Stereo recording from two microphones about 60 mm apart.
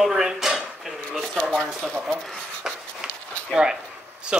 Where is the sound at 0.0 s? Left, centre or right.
Centre.